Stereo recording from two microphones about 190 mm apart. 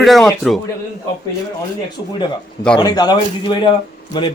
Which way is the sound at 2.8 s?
20° left (ahead or behind).